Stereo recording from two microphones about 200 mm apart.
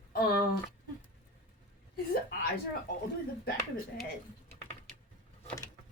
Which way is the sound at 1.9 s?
50° left (ahead or behind).